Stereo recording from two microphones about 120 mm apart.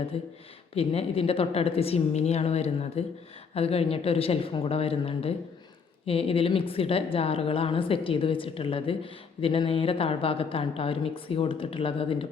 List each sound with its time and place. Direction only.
0.1 s a woman's voice: 55° left (ahead or behind)